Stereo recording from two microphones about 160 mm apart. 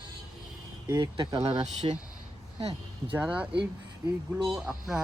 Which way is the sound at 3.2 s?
5° right (ahead or behind).